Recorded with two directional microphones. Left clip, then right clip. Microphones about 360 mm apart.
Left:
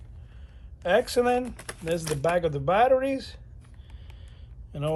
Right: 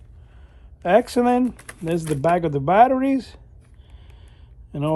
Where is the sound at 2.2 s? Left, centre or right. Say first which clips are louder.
Right 5 dB; centre.